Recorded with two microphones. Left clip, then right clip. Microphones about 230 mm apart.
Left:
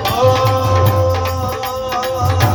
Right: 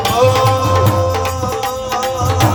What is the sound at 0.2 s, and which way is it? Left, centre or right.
Music, right.